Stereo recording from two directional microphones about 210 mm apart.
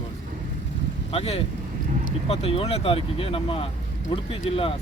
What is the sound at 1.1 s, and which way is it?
Speech, 30° left (ahead or behind).